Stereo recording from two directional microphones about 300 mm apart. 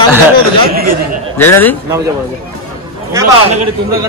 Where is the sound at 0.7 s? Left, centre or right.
Right.